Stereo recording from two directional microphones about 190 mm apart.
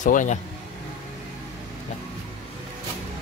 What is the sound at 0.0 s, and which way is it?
Speech, 40° left (ahead or behind).